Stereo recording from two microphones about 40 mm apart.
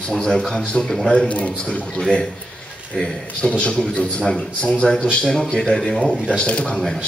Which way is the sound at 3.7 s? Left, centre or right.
Centre.